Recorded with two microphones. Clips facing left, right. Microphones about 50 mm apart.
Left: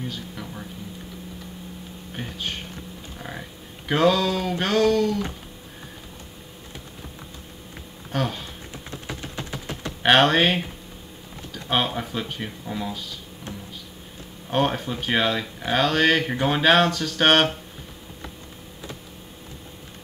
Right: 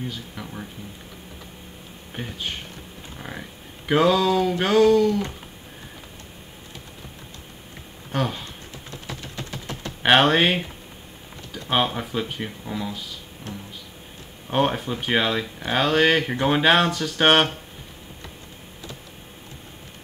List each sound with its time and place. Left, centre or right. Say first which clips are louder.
0.1 s speech: even; centre
2.1 s speech: even; centre
3.2 s a sound: right 1 dB; centre
8.1 s speech: right 1 dB; centre
9.0 s typing: left 1 dB; left
10.0 s speech: even; centre
11.6 s speech: right 1 dB; centre
14.5 s speech: right 1 dB; centre